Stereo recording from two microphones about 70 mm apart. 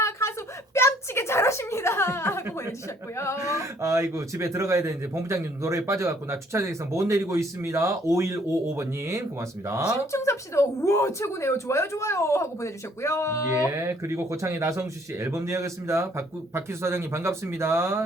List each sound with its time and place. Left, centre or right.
0.0 s a sound: left
3.5 s speech: right
10.1 s speech: left
13.7 s speech: right